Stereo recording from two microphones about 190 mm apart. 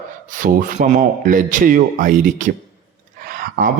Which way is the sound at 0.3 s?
45° right (ahead or behind).